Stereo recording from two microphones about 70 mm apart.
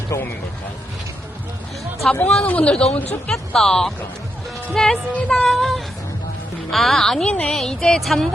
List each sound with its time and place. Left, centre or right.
2.0 s speech: centre
3.3 s speech: centre
5.5 s a woman's voice: centre